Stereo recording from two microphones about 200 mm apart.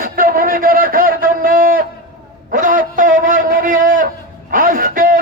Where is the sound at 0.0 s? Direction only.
45° right (ahead or behind).